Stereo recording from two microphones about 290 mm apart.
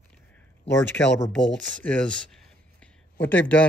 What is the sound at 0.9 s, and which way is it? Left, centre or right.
Speech, centre.